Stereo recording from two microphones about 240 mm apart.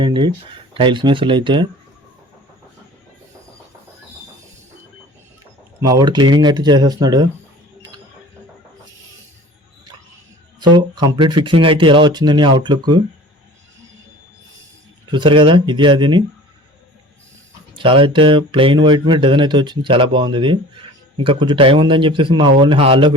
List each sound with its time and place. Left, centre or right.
0.0 s speech: centre
5.8 s speech: centre
7.8 s a sound: centre
10.6 s speech: centre
15.1 s speech: centre
17.7 s speech: right